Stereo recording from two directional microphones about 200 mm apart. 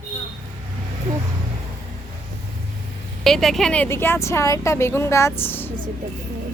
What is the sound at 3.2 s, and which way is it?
Speech, centre (ahead or behind).